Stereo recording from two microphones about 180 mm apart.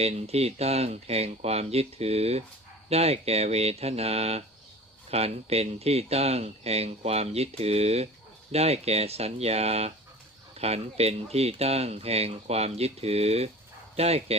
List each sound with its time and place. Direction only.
0.0 s speech: 35° right (ahead or behind)